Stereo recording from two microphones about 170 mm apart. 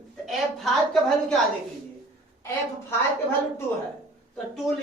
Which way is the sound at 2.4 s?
15° left (ahead or behind).